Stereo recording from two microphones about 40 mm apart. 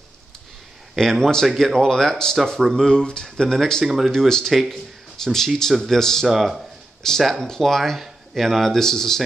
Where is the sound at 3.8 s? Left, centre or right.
Centre.